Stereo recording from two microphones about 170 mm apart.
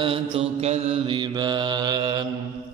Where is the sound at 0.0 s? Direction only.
30° right (ahead or behind).